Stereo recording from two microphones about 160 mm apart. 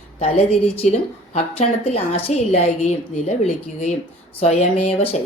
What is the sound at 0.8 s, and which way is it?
A woman's voice, 40° left (ahead or behind).